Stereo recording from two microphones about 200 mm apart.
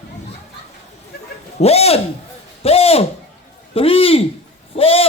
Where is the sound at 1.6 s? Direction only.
30° left (ahead or behind).